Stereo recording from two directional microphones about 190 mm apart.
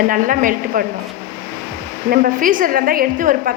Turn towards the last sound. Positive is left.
turn(degrees=-45)  # may be behind; listen again after turning